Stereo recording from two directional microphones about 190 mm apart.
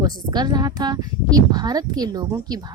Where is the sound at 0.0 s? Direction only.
20° right (ahead or behind).